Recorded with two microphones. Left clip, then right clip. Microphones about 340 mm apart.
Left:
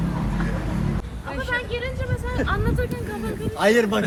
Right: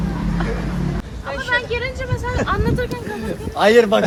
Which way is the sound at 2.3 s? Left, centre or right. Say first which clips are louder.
Right 5 dB; right.